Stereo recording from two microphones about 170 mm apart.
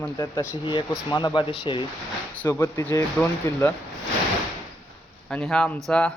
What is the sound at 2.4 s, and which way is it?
Speech, 15° left (ahead or behind).